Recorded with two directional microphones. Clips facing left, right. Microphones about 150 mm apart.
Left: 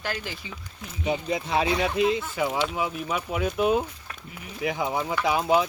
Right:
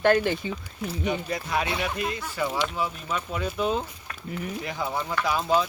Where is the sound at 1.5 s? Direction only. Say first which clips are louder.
Left 4 dB; 25° left (ahead or behind).